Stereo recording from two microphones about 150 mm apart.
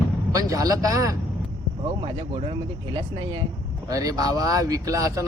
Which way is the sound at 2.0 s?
35° right (ahead or behind).